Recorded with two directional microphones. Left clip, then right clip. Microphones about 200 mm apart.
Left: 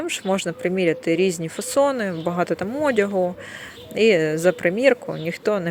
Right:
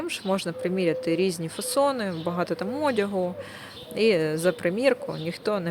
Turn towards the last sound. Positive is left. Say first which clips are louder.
# left 5 dB
turn(degrees=15)  # may be behind; listen again after turning